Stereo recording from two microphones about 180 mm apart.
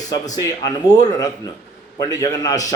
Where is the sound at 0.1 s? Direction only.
20° left (ahead or behind).